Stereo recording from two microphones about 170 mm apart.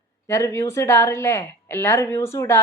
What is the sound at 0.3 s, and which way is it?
A woman's voice, 15° left (ahead or behind).